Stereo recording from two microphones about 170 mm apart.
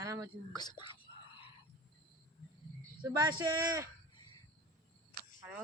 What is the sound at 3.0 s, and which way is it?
Speech, 20° right (ahead or behind).